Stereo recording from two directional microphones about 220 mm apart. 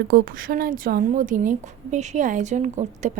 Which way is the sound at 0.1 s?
40° right (ahead or behind).